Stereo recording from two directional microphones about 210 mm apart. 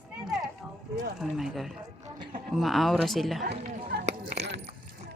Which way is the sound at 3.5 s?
30° right (ahead or behind).